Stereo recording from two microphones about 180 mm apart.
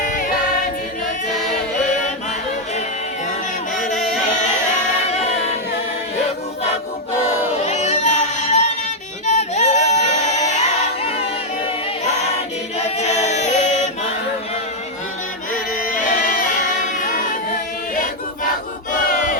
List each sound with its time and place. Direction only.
0.0 s choir: 45° left (ahead or behind)
7.6 s a sound: 40° left (ahead or behind)
9.2 s music: 40° left (ahead or behind)
13.0 s chant: 40° left (ahead or behind)
15.5 s singing: 50° left (ahead or behind)
18.9 s battle cry: 50° left (ahead or behind)